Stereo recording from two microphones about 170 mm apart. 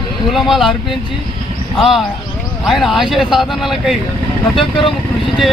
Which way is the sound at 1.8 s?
Centre (ahead or behind).